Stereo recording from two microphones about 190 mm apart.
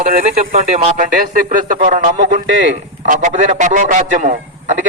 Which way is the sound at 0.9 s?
45° right (ahead or behind).